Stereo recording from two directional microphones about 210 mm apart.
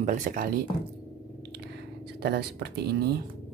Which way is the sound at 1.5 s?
50° right (ahead or behind).